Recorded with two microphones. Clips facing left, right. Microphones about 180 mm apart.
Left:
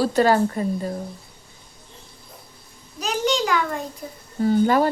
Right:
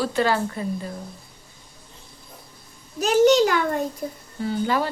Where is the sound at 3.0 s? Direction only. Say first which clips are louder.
Right 7 dB; 45° right (ahead or behind).